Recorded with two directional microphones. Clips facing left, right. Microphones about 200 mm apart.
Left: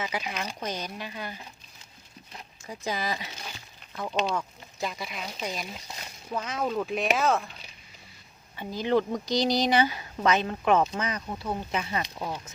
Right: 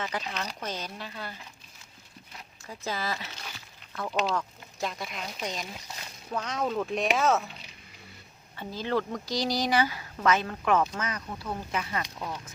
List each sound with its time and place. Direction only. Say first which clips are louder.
0.0 s speech: left 1 dB; 10° left (ahead or behind)
2.6 s speech: left 2 dB; 15° left (ahead or behind); by 7.5 s centre (ahead or behind)
8.5 s speech: left 4 dB; 15° left (ahead or behind)